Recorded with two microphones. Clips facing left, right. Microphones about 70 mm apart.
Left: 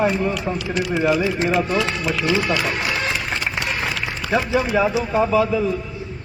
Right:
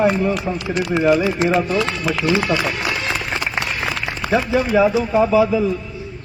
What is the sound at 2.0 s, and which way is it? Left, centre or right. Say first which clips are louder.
Speech: right 2 dB; right.